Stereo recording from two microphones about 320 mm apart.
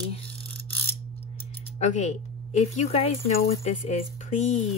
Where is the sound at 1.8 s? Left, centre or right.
Left.